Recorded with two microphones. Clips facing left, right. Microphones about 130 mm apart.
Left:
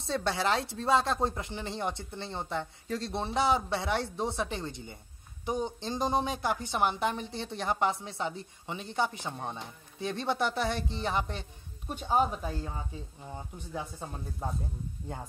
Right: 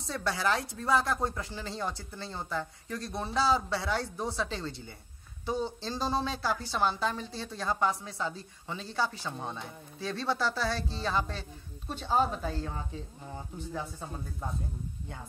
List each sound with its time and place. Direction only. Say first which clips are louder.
0.0 s a woman's voice: left 1 dB; 25° left (ahead or behind)